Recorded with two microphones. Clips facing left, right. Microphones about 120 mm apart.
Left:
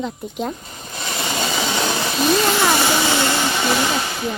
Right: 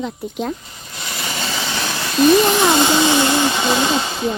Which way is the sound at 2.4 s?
20° right (ahead or behind).